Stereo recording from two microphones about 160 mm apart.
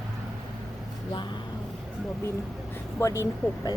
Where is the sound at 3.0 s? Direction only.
20° left (ahead or behind).